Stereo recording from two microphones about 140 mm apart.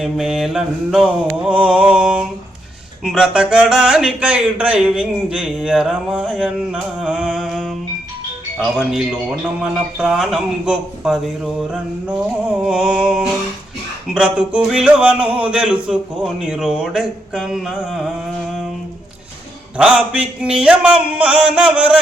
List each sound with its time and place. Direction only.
0.0 s a sound: 5° right (ahead or behind)
3.0 s speech: 5° right (ahead or behind)
8.8 s speech: 5° right (ahead or behind)
11.7 s music: 5° right (ahead or behind)
14.1 s speech: 5° right (ahead or behind)
19.7 s a sound: 10° right (ahead or behind)